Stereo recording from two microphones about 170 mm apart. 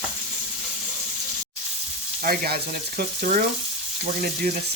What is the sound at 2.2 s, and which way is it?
Speech, 55° right (ahead or behind).